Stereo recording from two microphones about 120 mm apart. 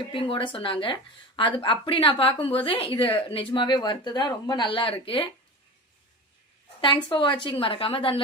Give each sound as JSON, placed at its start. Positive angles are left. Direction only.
{"t": 0.1, "sound": "a woman's voice", "side_deg": 45}
{"t": 7.1, "sound": "a woman's voice", "side_deg": 40}